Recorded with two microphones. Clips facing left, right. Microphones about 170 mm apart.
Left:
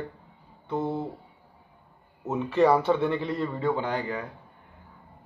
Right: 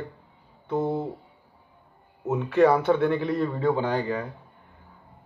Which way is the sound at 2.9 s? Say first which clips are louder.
Right 3 dB; 15° right (ahead or behind).